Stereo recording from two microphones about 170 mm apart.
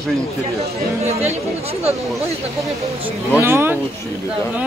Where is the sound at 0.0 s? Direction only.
Centre (ahead or behind).